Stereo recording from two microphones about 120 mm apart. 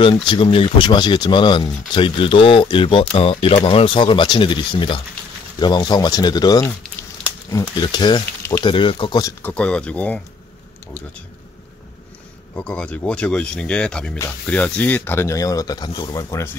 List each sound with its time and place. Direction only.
0.0 s speech: 45° left (ahead or behind)
7.7 s speech: 40° left (ahead or behind)
9.4 s speech: 10° left (ahead or behind)
12.5 s speech: 10° left (ahead or behind); by 16.4 s 30° left (ahead or behind)